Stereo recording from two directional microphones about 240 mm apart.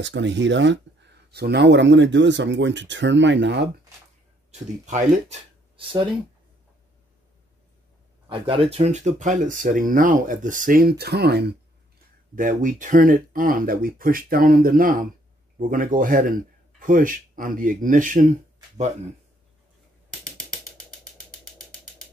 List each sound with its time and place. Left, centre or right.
0.0 s speech: right
4.8 s speech: right
8.3 s speech: right
12.4 s speech: right
20.1 s music: centre